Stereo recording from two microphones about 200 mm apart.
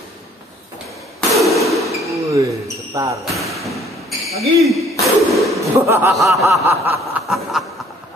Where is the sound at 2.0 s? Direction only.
15° right (ahead or behind).